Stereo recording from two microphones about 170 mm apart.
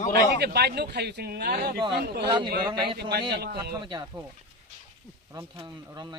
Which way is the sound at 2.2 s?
30° right (ahead or behind).